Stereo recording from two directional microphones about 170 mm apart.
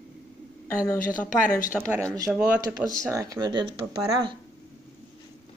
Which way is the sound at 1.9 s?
20° right (ahead or behind).